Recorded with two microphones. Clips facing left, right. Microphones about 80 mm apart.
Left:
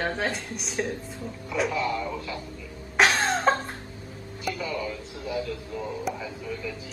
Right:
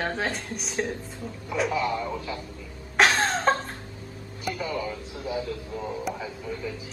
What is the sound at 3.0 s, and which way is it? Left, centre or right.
Cough, centre.